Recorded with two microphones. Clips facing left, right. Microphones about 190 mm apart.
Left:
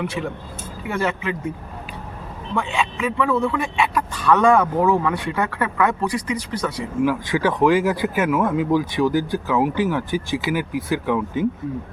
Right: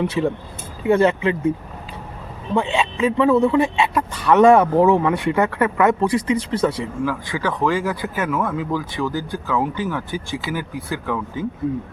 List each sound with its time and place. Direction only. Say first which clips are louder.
0.2 s a man's voice: right 6 dB; 25° right (ahead or behind)
2.6 s a man's voice: right 4 dB; 25° right (ahead or behind)
7.0 s speech: left 5 dB; 15° left (ahead or behind)